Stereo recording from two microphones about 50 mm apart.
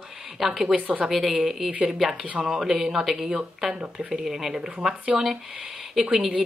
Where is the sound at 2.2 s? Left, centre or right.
Right.